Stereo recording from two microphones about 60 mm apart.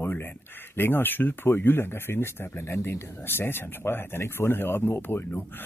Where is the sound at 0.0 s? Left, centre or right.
Left.